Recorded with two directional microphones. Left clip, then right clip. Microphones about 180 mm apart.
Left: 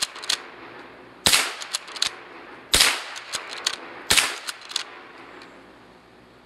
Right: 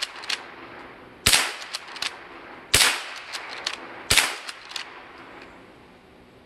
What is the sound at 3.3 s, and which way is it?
Gunshot, 50° left (ahead or behind).